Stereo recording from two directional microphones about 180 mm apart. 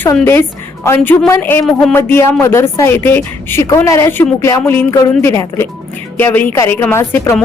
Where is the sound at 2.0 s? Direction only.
15° left (ahead or behind).